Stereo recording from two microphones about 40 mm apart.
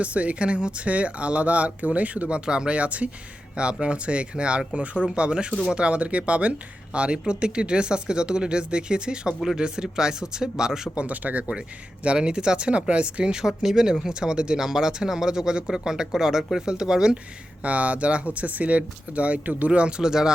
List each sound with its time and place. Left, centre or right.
0.0 s speech: right; by 10.8 s centre
10.9 s speech: right
12.0 s speech: right
13.6 s speech: centre
17.6 s speech: right
20.0 s speech: centre